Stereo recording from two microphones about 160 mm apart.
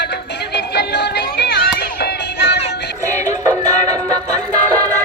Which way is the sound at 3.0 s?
20° right (ahead or behind).